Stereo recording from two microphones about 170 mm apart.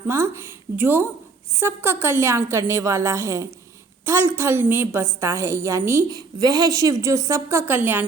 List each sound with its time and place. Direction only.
0.8 s a woman's voice: 10° right (ahead or behind)